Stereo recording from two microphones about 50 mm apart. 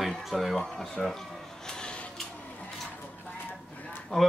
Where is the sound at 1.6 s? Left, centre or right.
Centre.